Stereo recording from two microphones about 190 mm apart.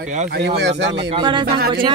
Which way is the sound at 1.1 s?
25° right (ahead or behind).